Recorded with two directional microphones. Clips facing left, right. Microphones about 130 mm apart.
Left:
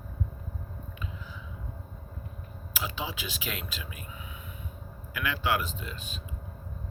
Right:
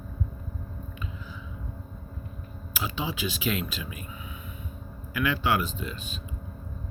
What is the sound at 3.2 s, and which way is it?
Speech, 5° left (ahead or behind).